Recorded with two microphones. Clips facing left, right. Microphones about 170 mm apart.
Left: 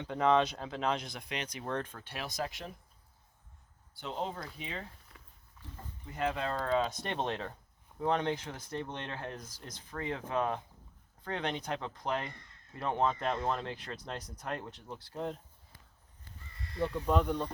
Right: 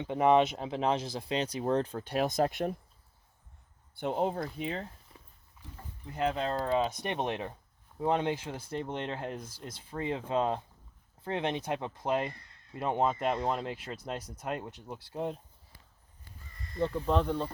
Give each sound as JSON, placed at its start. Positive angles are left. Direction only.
{"t": 0.0, "sound": "speech", "side_deg": -20}
{"t": 3.9, "sound": "speech", "side_deg": -55}
{"t": 6.3, "sound": "speech", "side_deg": -25}
{"t": 17.2, "sound": "speech", "side_deg": -5}